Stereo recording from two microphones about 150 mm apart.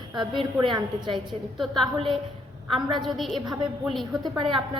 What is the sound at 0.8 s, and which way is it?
Speech, 30° right (ahead or behind).